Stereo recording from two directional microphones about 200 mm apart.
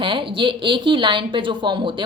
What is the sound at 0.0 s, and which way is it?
A woman's voice, 25° right (ahead or behind).